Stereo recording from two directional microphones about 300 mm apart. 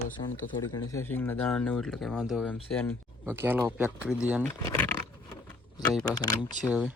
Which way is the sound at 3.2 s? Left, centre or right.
Centre.